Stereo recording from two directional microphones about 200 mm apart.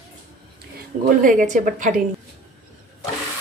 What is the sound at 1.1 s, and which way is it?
Speech, 40° right (ahead or behind).